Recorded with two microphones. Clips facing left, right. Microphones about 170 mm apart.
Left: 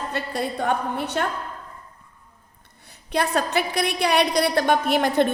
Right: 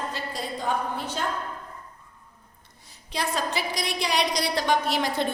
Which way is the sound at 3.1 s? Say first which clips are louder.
Left 6 dB; 60° left (ahead or behind).